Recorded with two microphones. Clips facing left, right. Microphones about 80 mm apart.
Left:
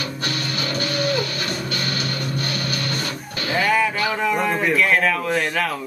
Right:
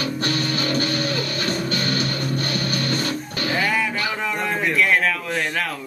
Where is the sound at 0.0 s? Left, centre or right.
Right.